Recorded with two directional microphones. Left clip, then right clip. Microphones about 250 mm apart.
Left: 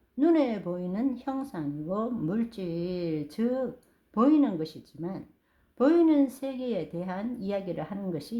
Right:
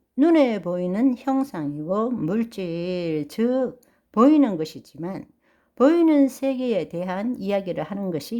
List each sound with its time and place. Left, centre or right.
0.2 s a woman's voice: right